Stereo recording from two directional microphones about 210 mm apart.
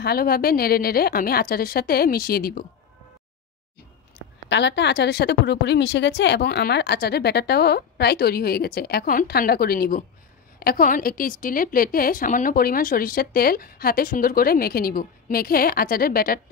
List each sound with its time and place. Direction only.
0.0 s a woman's voice: 45° left (ahead or behind)
4.5 s a woman's voice: 55° left (ahead or behind)